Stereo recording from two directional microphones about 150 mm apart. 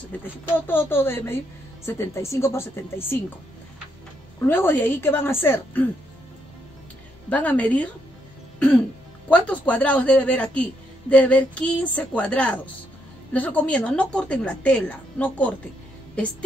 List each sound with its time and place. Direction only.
0.6 s a woman's voice: 15° left (ahead or behind)
4.5 s a woman's voice: 15° left (ahead or behind)
7.2 s a woman's voice: 10° left (ahead or behind)
8.5 s cough: 5° left (ahead or behind)
9.3 s a woman's voice: 10° left (ahead or behind)